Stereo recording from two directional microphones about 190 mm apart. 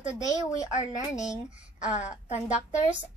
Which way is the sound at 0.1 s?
15° left (ahead or behind).